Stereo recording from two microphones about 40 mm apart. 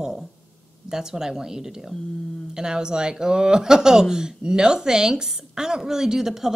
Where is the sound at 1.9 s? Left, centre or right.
Centre.